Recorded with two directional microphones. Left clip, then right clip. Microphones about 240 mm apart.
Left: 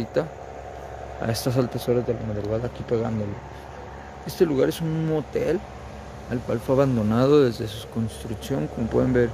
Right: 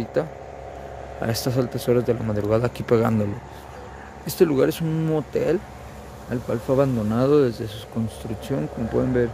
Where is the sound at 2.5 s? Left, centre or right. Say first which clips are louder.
Right 6 dB; right.